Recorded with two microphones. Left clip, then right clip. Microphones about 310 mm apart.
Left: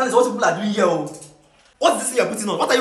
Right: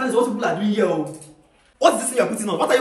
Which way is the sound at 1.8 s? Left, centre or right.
Centre.